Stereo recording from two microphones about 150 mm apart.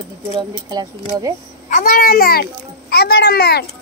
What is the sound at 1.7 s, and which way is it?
A child's voice, 65° left (ahead or behind).